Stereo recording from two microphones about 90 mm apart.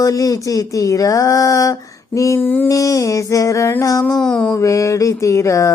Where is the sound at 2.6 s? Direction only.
40° left (ahead or behind).